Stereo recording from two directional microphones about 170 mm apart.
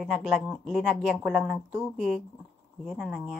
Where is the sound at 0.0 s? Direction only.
Centre (ahead or behind).